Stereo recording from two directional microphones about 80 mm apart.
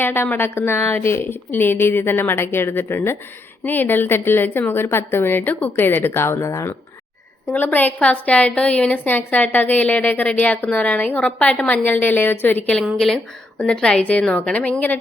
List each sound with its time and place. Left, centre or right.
0.0 s a woman's voice: left
6.4 s speech: left
7.5 s a woman's voice: left
12.8 s a woman's voice: centre